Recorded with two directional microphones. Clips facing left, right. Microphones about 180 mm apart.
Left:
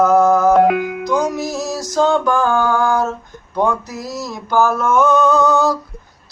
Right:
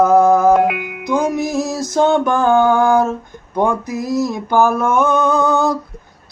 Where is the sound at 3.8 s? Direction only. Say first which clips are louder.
Right 8 dB; 55° right (ahead or behind).